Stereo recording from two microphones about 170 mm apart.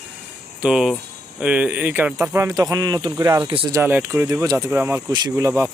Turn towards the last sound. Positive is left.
turn(degrees=-20)  # may be behind; listen again after turning